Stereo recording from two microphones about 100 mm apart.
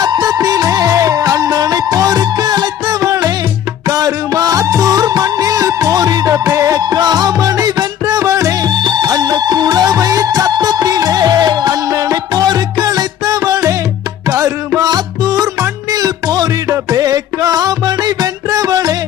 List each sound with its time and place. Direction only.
0.0 s music: 40° right (ahead or behind)
8.7 s music: 45° right (ahead or behind)